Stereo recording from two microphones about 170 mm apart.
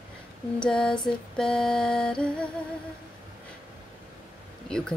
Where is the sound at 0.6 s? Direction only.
5° left (ahead or behind).